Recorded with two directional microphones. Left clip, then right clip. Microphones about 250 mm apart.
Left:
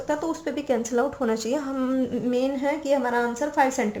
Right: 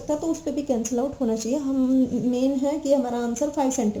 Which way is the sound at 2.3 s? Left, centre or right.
Centre.